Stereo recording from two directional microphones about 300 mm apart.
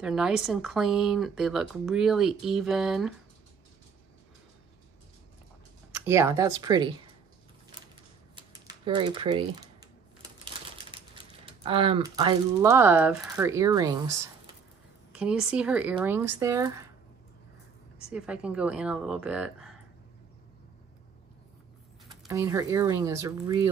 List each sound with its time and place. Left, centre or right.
0.0 s speech: centre
5.9 s speech: centre
8.4 s speech: centre
10.2 s typewriter: centre
11.4 s speech: centre
18.1 s speech: centre
22.2 s speech: centre